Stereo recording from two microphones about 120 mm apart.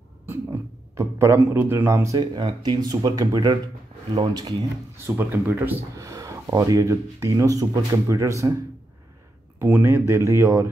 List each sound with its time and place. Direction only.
0.3 s a sound: 20° right (ahead or behind)
2.3 s speech: 40° right (ahead or behind)
4.9 s speech: 20° right (ahead or behind)